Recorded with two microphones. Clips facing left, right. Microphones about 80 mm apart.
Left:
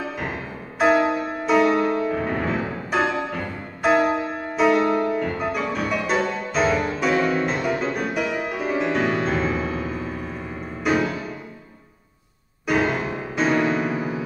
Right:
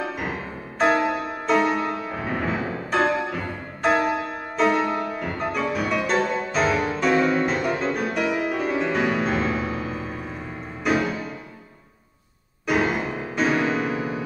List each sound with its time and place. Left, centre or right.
0.7 s music: centre
12.6 s music: centre